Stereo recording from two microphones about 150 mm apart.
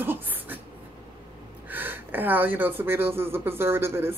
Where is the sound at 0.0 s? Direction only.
15° right (ahead or behind).